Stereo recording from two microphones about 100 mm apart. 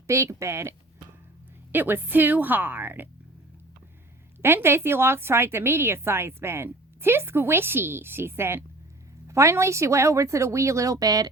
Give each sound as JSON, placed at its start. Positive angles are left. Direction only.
{"t": 0.1, "sound": "a woman's voice", "side_deg": -30}
{"t": 1.7, "sound": "a woman's voice", "side_deg": -20}
{"t": 4.4, "sound": "a woman's voice", "side_deg": -25}